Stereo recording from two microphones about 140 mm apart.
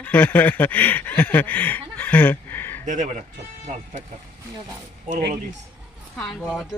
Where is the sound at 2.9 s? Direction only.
60° right (ahead or behind).